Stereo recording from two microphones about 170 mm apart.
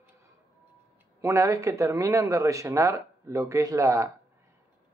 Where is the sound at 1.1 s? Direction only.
15° right (ahead or behind).